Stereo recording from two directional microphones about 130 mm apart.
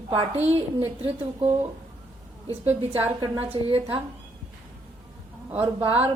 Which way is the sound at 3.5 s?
40° right (ahead or behind).